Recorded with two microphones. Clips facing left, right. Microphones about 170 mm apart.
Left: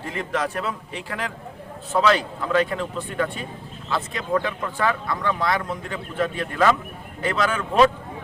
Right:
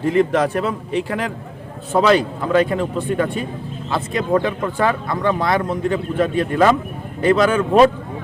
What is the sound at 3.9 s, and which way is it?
Speech, 35° right (ahead or behind).